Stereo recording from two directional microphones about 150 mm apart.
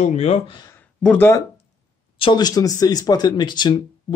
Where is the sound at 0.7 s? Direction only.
10° left (ahead or behind).